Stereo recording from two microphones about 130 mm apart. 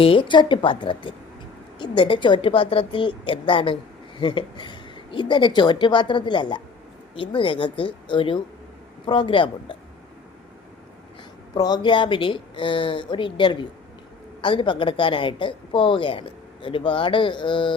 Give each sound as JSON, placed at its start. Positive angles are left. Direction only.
{"t": 0.0, "sound": "speech", "side_deg": 40}
{"t": 11.5, "sound": "speech", "side_deg": 30}